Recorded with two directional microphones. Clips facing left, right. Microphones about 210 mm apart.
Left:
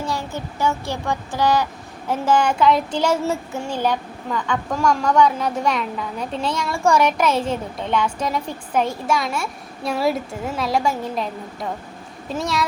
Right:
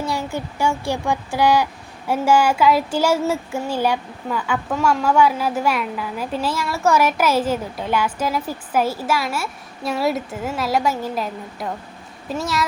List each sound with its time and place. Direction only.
0.0 s speech: 15° right (ahead or behind)